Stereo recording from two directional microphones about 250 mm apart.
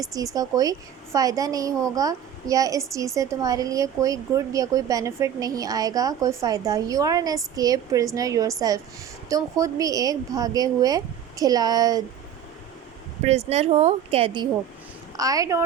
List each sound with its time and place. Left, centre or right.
0.0 s a woman's voice: centre
13.2 s a woman's voice: right